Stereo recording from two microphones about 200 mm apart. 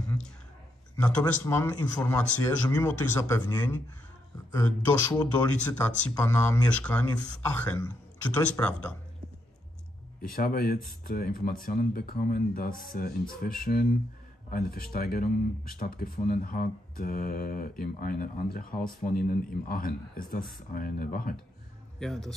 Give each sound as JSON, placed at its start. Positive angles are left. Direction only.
{"t": 0.9, "sound": "speech", "side_deg": 5}
{"t": 8.4, "sound": "speech", "side_deg": 5}
{"t": 10.2, "sound": "speech", "side_deg": 45}
{"t": 22.0, "sound": "a man's voice", "side_deg": 0}